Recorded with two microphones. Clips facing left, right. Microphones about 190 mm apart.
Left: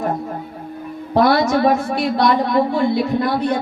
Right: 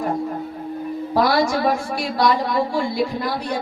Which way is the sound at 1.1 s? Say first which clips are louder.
Left 4 dB; 25° left (ahead or behind).